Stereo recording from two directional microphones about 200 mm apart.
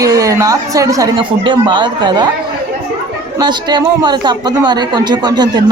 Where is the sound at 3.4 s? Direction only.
20° right (ahead or behind).